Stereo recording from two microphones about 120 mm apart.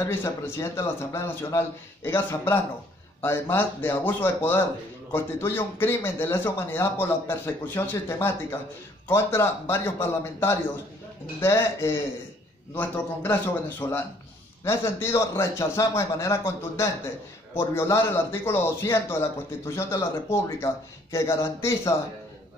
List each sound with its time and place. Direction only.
0.0 s a man's voice: 20° left (ahead or behind)
11.4 s a man's voice: 25° left (ahead or behind)